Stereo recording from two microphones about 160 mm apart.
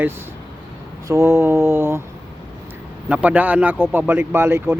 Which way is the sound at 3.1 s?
10° right (ahead or behind).